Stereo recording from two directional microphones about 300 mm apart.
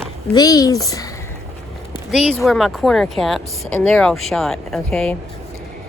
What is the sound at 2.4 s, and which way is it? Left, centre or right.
Speech, centre.